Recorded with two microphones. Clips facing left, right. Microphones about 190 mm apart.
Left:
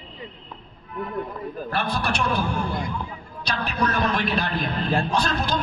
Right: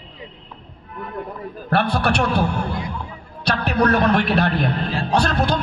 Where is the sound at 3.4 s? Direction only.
65° right (ahead or behind).